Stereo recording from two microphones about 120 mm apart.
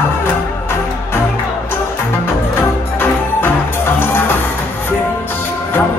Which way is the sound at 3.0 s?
15° left (ahead or behind).